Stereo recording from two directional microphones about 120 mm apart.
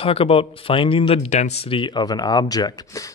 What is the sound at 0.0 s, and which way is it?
Speech, 50° left (ahead or behind).